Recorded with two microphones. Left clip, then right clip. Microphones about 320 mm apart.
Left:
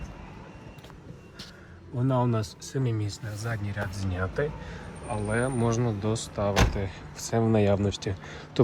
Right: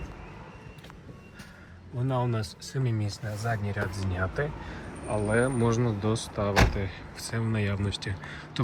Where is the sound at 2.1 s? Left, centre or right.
Centre.